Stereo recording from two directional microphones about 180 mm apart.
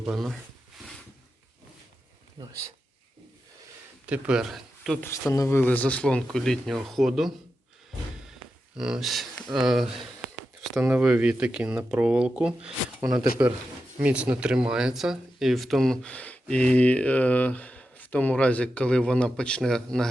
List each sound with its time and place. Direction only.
0.0 s speech: centre (ahead or behind)
2.4 s speech: 20° right (ahead or behind)
4.0 s speech: 5° right (ahead or behind)
5.0 s speech: 15° left (ahead or behind); by 7.3 s centre (ahead or behind)
8.7 s speech: 5° right (ahead or behind)